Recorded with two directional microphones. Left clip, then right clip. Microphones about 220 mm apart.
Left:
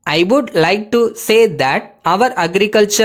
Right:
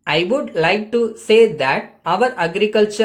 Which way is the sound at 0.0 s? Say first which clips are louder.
Left 4 dB; 50° left (ahead or behind).